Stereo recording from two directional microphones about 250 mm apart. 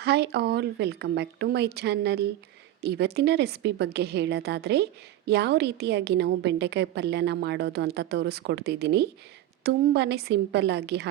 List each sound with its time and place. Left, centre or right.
0.0 s a woman's voice: right